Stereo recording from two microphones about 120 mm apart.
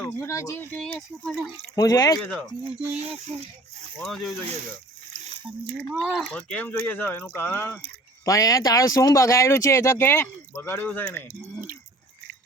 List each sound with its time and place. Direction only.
0.0 s speech: 25° left (ahead or behind); by 1.5 s 10° left (ahead or behind)
1.7 s speech: 30° left (ahead or behind)
4.0 s speech: centre (ahead or behind)
6.0 s speech: 10° left (ahead or behind)